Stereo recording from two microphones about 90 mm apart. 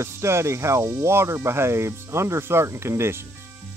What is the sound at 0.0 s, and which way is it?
Speech, 30° right (ahead or behind).